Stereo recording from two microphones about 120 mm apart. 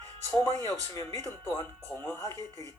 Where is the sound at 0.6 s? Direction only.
30° left (ahead or behind).